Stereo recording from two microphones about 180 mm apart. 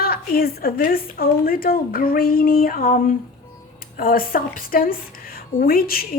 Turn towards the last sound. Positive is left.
turn(degrees=55)  # may be behind; listen again after turning